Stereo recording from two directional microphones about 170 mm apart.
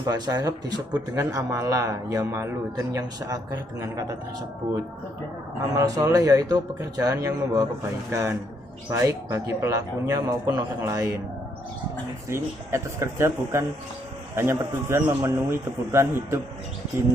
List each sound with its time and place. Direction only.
0.1 s speech: 25° right (ahead or behind)
5.7 s speech: 20° right (ahead or behind)
12.3 s speech: 15° right (ahead or behind)